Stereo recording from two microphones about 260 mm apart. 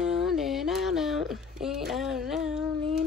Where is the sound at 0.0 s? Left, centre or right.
Centre.